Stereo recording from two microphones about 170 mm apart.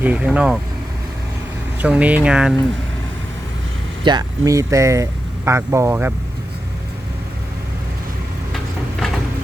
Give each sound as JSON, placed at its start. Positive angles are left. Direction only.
{"t": 0.0, "sound": "speech", "side_deg": -10}
{"t": 1.8, "sound": "speech", "side_deg": -10}
{"t": 4.0, "sound": "speech", "side_deg": -25}